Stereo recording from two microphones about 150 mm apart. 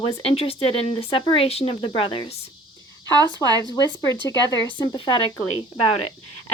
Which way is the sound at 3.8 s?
30° left (ahead or behind).